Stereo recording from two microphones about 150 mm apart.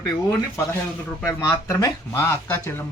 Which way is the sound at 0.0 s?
15° left (ahead or behind).